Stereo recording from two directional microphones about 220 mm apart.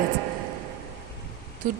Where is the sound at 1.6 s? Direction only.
40° right (ahead or behind).